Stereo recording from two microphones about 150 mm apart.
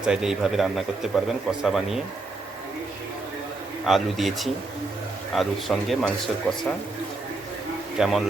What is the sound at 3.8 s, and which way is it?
A man's voice, centre (ahead or behind).